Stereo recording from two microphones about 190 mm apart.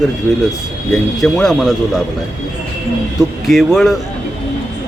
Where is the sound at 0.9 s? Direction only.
Centre (ahead or behind).